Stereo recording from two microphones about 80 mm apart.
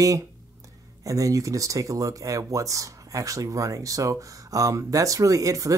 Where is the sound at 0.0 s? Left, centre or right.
Right.